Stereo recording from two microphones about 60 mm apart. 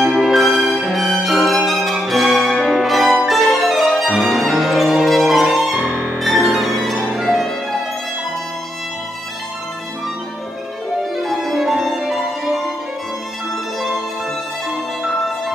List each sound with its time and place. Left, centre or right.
0.0 s music: centre
5.9 s music: right
6.1 s violin: centre
11.1 s violin: centre
13.7 s music: centre